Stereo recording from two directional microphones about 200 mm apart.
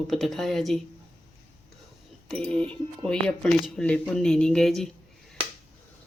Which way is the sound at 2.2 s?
5° left (ahead or behind).